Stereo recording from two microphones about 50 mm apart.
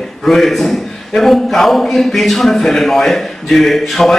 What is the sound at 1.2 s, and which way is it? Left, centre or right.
A man's voice, centre.